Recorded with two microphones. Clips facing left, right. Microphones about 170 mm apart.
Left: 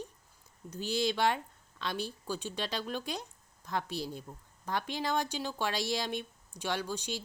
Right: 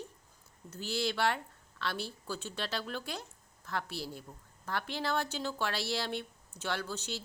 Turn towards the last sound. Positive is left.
turn(degrees=15)  # may be behind; listen again after turning